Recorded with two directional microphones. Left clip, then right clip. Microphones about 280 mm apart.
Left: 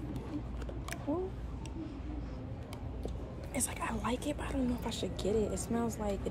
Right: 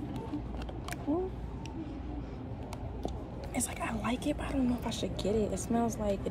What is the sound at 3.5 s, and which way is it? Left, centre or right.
A woman's voice, centre.